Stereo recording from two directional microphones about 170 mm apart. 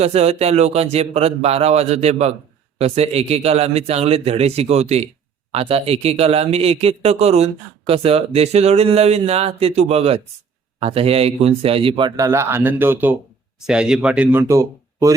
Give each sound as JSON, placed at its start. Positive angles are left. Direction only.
{"t": 0.0, "sound": "speech", "side_deg": -40}